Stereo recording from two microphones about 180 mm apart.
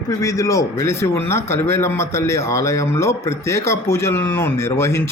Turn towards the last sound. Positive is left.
turn(degrees=15)  # may be behind; listen again after turning